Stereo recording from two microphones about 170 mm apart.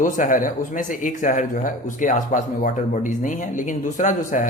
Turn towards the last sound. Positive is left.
turn(degrees=50)  # may be behind; listen again after turning